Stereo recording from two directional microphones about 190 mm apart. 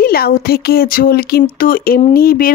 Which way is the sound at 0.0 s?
50° left (ahead or behind).